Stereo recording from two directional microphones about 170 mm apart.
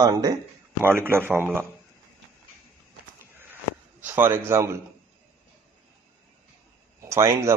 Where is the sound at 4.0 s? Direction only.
10° right (ahead or behind).